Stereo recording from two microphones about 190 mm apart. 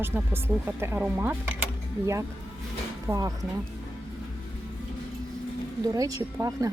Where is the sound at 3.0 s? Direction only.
15° right (ahead or behind).